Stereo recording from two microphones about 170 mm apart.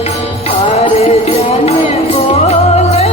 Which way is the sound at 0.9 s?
40° left (ahead or behind).